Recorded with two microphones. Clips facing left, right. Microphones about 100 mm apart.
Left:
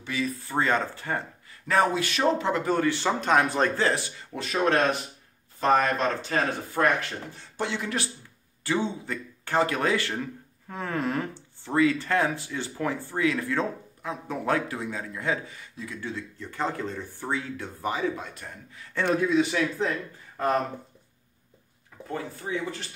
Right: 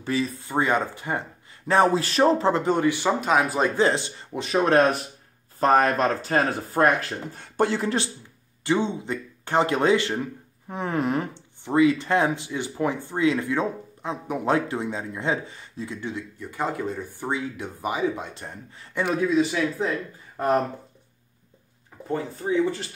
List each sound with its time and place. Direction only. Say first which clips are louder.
0.0 s speech: right 4 dB; 35° right (ahead or behind)
0.4 s speech: even; 15° right (ahead or behind)
1.7 s speech: right 4 dB; 30° right (ahead or behind); by 3.7 s 5° right (ahead or behind)
3.7 s speech: right 4 dB; 20° right (ahead or behind)
5.6 s speech: right 3 dB; 45° right (ahead or behind)
8.6 s speech: right 4 dB; 20° right (ahead or behind)
18.9 s speech: right 1 dB; 5° right (ahead or behind)
20.3 s speech: right 3 dB; 15° right (ahead or behind)
22.0 s speech: right 6 dB; 30° right (ahead or behind)